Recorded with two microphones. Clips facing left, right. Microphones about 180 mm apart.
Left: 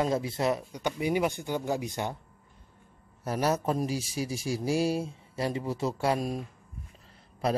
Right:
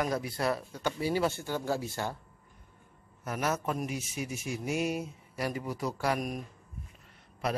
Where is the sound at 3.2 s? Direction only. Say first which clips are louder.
Left 4 dB; 35° left (ahead or behind).